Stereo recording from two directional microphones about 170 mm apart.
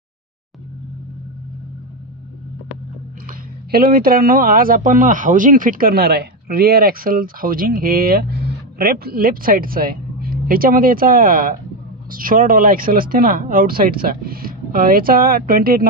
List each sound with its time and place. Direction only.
3.7 s speech: 60° right (ahead or behind)